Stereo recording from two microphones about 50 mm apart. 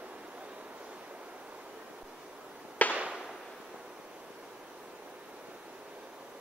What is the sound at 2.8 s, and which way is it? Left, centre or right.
Fireworks, left.